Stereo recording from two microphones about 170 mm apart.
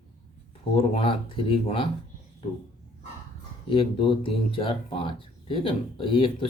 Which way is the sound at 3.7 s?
30° left (ahead or behind).